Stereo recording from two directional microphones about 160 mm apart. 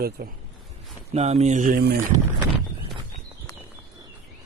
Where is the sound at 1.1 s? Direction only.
40° right (ahead or behind); by 2.0 s 75° right (ahead or behind).